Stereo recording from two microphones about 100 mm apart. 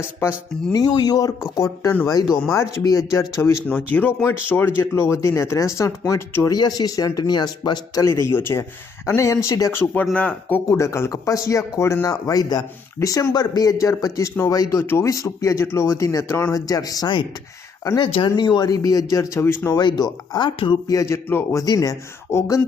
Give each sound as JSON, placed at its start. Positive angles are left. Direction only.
{"t": 0.7, "sound": "a man's voice", "side_deg": 40}
{"t": 3.1, "sound": "a man's voice", "side_deg": 35}
{"t": 3.7, "sound": "speech", "side_deg": 15}
{"t": 6.5, "sound": "a man's voice", "side_deg": 40}
{"t": 8.0, "sound": "a man's voice", "side_deg": 30}
{"t": 9.7, "sound": "speech", "side_deg": 20}
{"t": 10.7, "sound": "a man's voice", "side_deg": 30}
{"t": 17.9, "sound": "speech", "side_deg": 55}
{"t": 18.3, "sound": "a man's voice", "side_deg": 45}
{"t": 19.7, "sound": "speech", "side_deg": 45}
{"t": 20.8, "sound": "a man's voice", "side_deg": 35}
{"t": 21.2, "sound": "speech", "side_deg": 25}
{"t": 21.6, "sound": "a man's voice", "side_deg": 35}